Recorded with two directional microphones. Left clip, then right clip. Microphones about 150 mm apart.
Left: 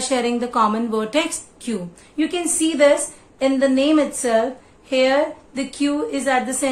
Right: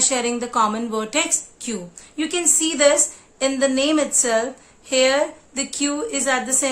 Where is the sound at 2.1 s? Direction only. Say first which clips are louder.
Even; 30° right (ahead or behind).